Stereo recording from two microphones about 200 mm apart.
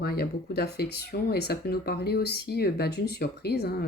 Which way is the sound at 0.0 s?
50° left (ahead or behind).